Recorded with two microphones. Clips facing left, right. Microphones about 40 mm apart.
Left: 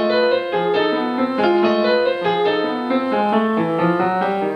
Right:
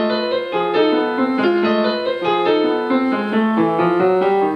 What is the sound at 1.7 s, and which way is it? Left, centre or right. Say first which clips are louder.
Music: left 2 dB; centre.